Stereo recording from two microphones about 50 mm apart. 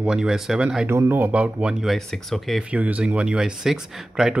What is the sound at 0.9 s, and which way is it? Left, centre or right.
Speech, right.